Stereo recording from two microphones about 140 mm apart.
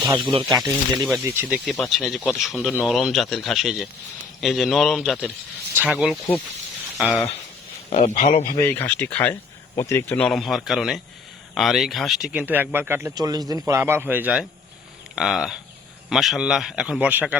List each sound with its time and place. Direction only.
0.0 s speech: 30° right (ahead or behind)
1.3 s a man's voice: 10° right (ahead or behind)
5.7 s speech: 10° right (ahead or behind)
7.9 s speech: 55° left (ahead or behind)
8.1 s speech: 75° left (ahead or behind)
8.5 s a man's voice: 15° left (ahead or behind); by 12.3 s centre (ahead or behind)
12.3 s speech: 10° right (ahead or behind)
13.1 s a man's voice: 25° right (ahead or behind); by 17.3 s 10° right (ahead or behind)